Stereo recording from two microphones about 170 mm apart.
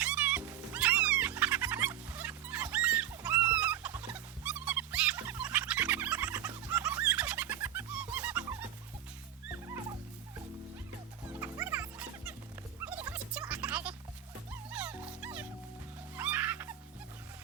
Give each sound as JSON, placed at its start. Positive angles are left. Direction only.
{"t": 0.0, "sound": "music", "side_deg": -5}
{"t": 11.3, "sound": "music", "side_deg": -15}